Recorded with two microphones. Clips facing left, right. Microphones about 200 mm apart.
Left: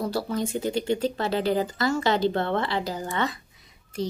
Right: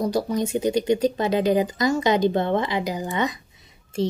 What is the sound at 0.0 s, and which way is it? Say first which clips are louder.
Speech: right 4 dB; 15° right (ahead or behind).